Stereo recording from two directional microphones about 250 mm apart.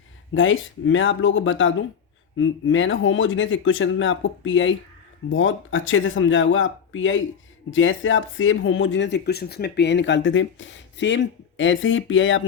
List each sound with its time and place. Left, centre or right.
0.3 s speech: left